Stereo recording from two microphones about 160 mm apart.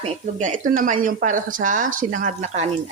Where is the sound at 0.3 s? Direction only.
50° right (ahead or behind).